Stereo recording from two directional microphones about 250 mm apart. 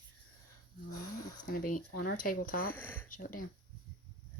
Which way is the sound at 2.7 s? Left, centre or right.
Centre.